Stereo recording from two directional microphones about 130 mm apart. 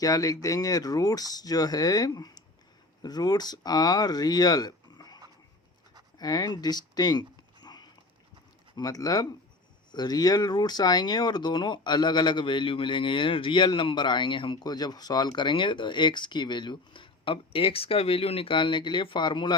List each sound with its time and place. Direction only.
0.0 s speech: 30° left (ahead or behind)
6.1 s a sound: 30° left (ahead or behind)
8.7 s speech: 30° left (ahead or behind)